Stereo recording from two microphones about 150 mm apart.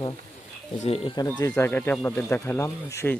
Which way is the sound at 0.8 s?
40° left (ahead or behind).